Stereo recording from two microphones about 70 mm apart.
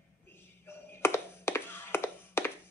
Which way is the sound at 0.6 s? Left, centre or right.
Left.